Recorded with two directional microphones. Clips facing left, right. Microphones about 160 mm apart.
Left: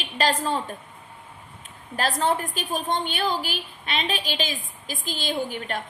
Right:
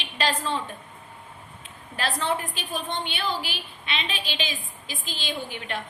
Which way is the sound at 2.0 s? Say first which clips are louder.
Left 3 dB; 45° left (ahead or behind).